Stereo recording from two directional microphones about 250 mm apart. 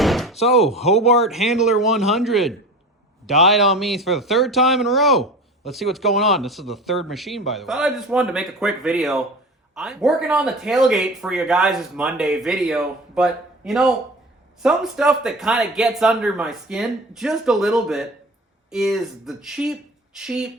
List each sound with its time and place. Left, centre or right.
0.0 s door: centre
0.4 s speech: centre
0.8 s speech: left
1.2 s speech: centre